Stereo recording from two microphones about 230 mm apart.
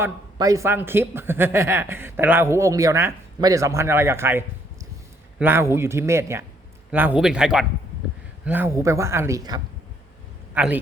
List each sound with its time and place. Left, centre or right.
0.0 s a man's voice: centre